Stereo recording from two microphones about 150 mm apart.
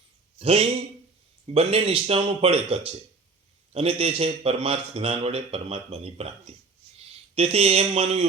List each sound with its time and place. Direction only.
0.3 s a man's voice: 40° right (ahead or behind)